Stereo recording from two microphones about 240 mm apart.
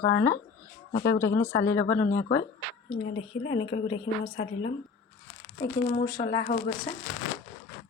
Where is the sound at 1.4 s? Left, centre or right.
Centre.